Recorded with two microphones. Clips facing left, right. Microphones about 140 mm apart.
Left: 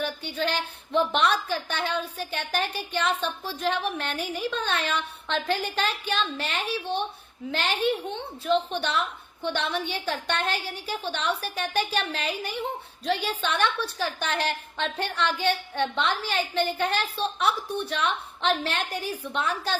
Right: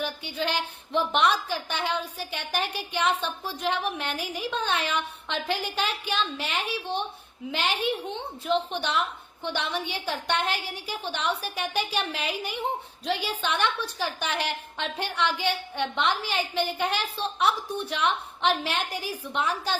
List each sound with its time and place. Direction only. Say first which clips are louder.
0.0 s a woman's voice: left 1 dB; 15° right (ahead or behind)